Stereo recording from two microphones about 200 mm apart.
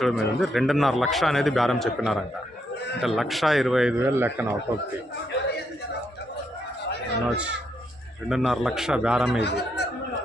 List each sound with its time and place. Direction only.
0.0 s a man's voice: centre (ahead or behind)
4.0 s speech: 10° right (ahead or behind)
7.3 s a man's voice: 5° right (ahead or behind)
9.4 s speech: 55° left (ahead or behind)